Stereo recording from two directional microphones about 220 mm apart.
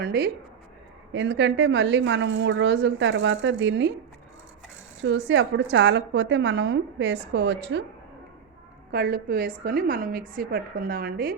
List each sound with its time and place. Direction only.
0.0 s a woman's voice: 45° right (ahead or behind)
5.0 s a woman's voice: 55° right (ahead or behind)
8.9 s a woman's voice: 45° right (ahead or behind)